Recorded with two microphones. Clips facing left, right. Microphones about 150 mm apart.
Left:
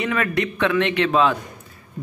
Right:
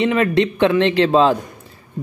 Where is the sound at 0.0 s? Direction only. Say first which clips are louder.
Right 6 dB; 25° right (ahead or behind).